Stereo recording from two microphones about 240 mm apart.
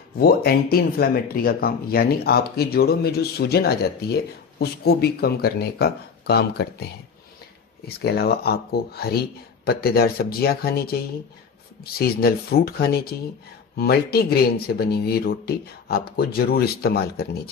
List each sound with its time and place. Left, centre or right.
0.2 s speech: left